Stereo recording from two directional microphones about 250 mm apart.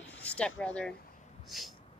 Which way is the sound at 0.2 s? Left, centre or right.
Centre.